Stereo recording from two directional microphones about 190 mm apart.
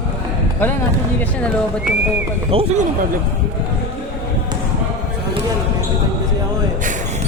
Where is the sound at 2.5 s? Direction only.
35° right (ahead or behind).